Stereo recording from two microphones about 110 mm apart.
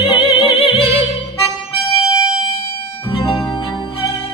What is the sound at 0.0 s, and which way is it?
Music, 55° left (ahead or behind).